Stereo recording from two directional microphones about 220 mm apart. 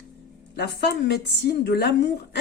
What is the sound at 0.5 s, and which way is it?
A woman's voice, 50° left (ahead or behind).